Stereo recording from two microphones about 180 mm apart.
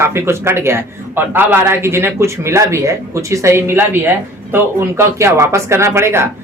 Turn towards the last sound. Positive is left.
turn(degrees=-15)  # may be behind; listen again after turning